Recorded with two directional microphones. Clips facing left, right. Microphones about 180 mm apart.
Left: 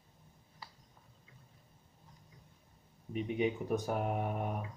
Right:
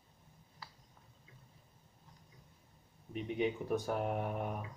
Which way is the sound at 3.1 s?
5° left (ahead or behind).